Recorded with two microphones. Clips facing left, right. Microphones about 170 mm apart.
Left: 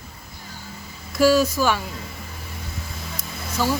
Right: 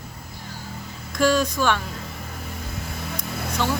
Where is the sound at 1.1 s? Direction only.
5° left (ahead or behind).